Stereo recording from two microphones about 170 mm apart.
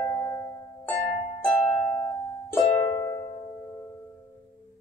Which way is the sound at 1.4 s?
10° left (ahead or behind).